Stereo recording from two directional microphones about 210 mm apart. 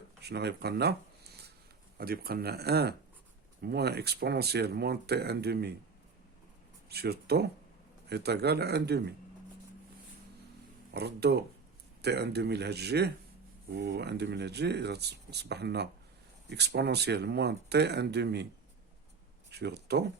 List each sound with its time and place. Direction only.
0.2 s speech: 50° right (ahead or behind)
2.0 s speech: 45° right (ahead or behind)
6.8 s speech: 50° right (ahead or behind)
10.9 s speech: 50° right (ahead or behind)
19.5 s speech: 55° right (ahead or behind)